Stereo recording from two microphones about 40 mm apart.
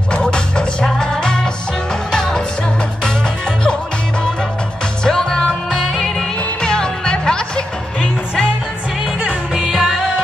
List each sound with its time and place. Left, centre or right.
0.1 s music: left
5.0 s music: centre
5.7 s music: centre
6.1 s music: centre
9.6 s music: centre